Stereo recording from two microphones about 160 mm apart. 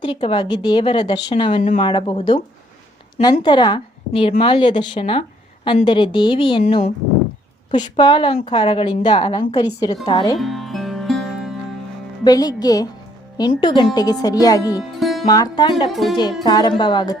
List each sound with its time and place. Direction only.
0.0 s a woman's voice: 30° left (ahead or behind)
3.4 s a woman's voice: 30° left (ahead or behind)
10.3 s music: centre (ahead or behind)
12.2 s speech: 25° left (ahead or behind)
14.8 s music: centre (ahead or behind)
15.3 s speech: 25° left (ahead or behind)
15.9 s speech: centre (ahead or behind)
16.4 s speech: 25° left (ahead or behind)